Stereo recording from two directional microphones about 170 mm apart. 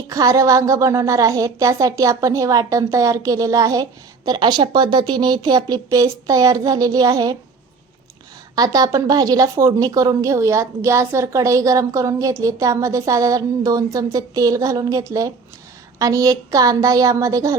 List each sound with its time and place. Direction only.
0.1 s speech: 20° right (ahead or behind)
8.5 s speech: 20° right (ahead or behind)